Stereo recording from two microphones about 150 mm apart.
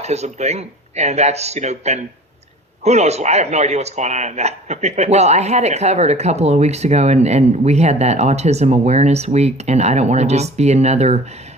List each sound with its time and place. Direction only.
0.0 s a man's voice: 45° right (ahead or behind)